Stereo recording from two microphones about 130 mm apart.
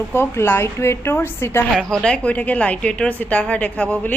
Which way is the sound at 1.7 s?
5° left (ahead or behind).